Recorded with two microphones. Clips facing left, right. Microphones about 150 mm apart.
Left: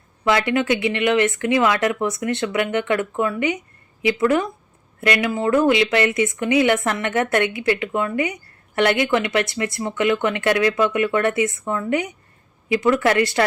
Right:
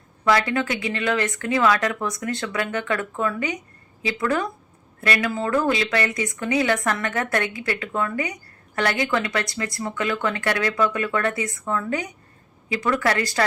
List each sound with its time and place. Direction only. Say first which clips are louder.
0.3 s a woman's voice: left 2 dB; 25° left (ahead or behind)